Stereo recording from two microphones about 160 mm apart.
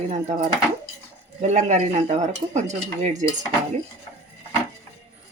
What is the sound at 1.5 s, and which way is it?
Speech, 50° right (ahead or behind).